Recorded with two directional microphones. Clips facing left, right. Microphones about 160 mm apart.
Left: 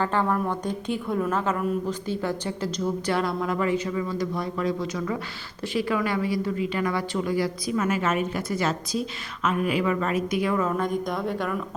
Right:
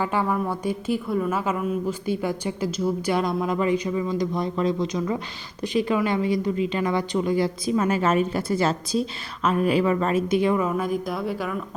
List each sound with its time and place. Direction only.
0.0 s a woman's voice: 10° right (ahead or behind)
10.6 s speech: 10° right (ahead or behind)